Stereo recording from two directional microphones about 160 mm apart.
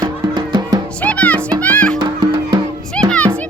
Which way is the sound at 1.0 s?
10° left (ahead or behind).